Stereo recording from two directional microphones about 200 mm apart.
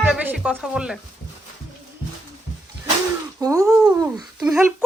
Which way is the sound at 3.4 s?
15° right (ahead or behind).